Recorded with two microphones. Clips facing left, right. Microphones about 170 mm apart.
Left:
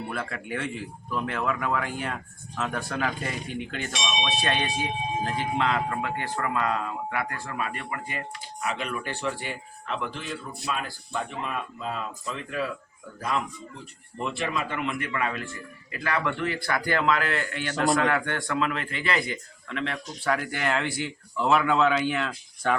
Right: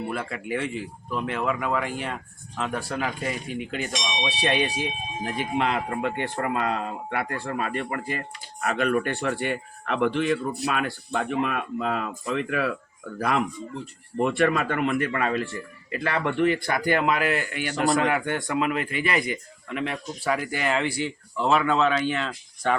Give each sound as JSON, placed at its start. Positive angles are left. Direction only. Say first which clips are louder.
{"t": 0.1, "sound": "speech", "louder": "right 3 dB", "side_deg": -5}
{"t": 5.2, "sound": "speech", "louder": "right 3 dB", "side_deg": -20}
{"t": 8.6, "sound": "speech", "louder": "right 7 dB", "side_deg": -55}
{"t": 14.2, "sound": "speech", "louder": "right 8 dB", "side_deg": -55}
{"t": 15.9, "sound": "a man's voice", "louder": "right 2 dB", "side_deg": -30}